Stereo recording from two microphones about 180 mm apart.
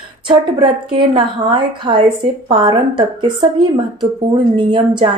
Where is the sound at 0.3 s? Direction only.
25° right (ahead or behind).